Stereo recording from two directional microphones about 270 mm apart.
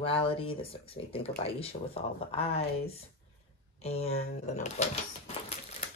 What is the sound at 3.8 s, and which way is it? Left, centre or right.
Speech, left.